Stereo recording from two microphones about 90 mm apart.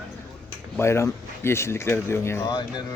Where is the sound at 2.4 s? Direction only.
55° left (ahead or behind).